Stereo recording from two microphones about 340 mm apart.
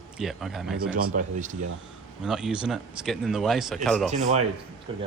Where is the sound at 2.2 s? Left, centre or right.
Centre.